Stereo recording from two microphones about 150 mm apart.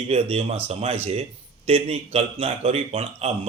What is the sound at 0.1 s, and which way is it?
A man's voice, 40° right (ahead or behind).